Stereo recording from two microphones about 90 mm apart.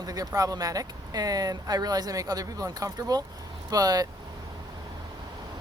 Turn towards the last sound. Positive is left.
turn(degrees=-45)  # may be behind; listen again after turning